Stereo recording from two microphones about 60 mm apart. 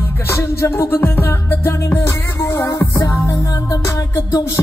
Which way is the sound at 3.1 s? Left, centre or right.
Left.